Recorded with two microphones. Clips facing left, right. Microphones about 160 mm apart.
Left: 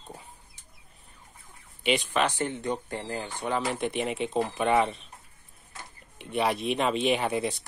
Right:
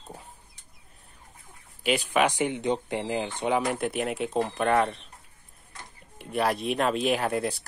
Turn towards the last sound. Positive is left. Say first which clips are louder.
# even
turn(degrees=0)  # may be behind; listen again after turning